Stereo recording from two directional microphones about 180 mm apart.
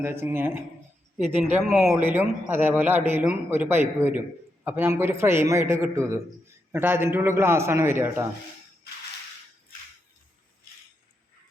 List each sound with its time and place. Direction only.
0.0 s a man's voice: 15° right (ahead or behind)
1.2 s speech: 40° right (ahead or behind)
1.7 s speech: centre (ahead or behind)
2.0 s a man's voice: 10° right (ahead or behind)